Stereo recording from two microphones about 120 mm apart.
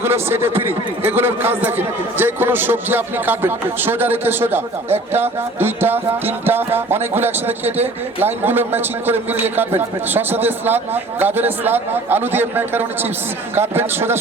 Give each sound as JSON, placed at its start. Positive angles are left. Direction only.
{"t": 0.0, "sound": "a man's voice", "side_deg": -20}